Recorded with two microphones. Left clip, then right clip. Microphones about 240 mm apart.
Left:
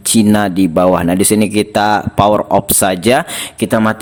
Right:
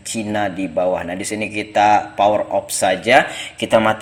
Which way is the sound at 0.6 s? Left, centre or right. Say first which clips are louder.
Left 8 dB; left.